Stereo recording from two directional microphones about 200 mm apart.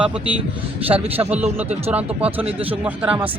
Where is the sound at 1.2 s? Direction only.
5° right (ahead or behind).